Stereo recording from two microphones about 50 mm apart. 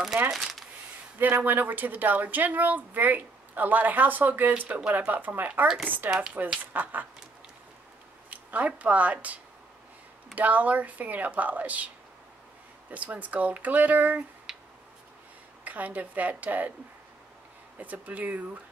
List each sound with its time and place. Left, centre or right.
0.3 s speech: centre
1.2 s speech: right
6.0 s speech: centre
6.6 s speech: right
8.3 s speech: right
12.9 s speech: right
14.5 s a sound: centre
15.6 s speech: right
17.7 s speech: right